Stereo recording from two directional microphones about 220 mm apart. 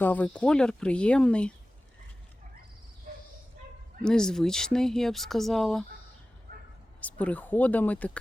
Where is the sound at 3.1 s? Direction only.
40° right (ahead or behind).